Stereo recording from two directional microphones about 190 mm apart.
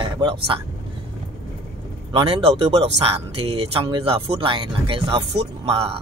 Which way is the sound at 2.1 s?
25° right (ahead or behind).